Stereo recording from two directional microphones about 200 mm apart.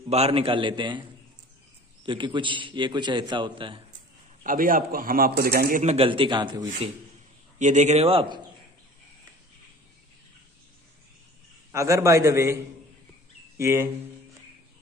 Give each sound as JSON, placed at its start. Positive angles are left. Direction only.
{"t": 0.1, "sound": "a man's voice", "side_deg": -30}
{"t": 2.0, "sound": "a man's voice", "side_deg": -25}
{"t": 4.4, "sound": "a man's voice", "side_deg": -45}
{"t": 7.5, "sound": "speech", "side_deg": -35}
{"t": 11.7, "sound": "a man's voice", "side_deg": -15}
{"t": 13.6, "sound": "speech", "side_deg": -15}